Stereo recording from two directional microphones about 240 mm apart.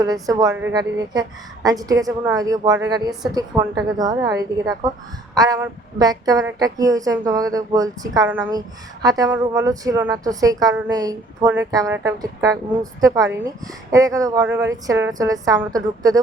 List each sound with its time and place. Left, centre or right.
0.0 s a woman's voice: centre